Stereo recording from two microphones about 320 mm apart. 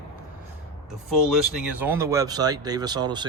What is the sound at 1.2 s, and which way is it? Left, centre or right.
Speech, centre.